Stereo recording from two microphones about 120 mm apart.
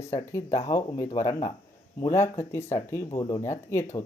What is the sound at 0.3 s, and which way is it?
Speech, 25° left (ahead or behind).